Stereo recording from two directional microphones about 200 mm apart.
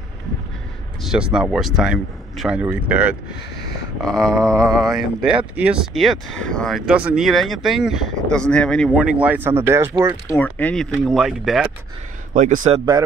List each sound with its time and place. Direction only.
1.0 s speech: 5° right (ahead or behind)
10.3 s speech: 5° left (ahead or behind)
12.4 s a man's voice: 40° right (ahead or behind)